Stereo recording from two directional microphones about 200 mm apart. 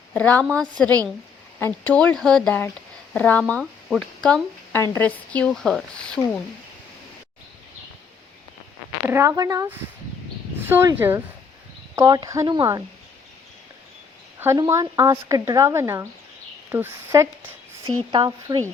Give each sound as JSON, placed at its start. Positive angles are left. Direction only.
{"t": 0.1, "sound": "a woman's voice", "side_deg": 5}
{"t": 9.0, "sound": "speech", "side_deg": -15}
{"t": 14.3, "sound": "speech", "side_deg": -15}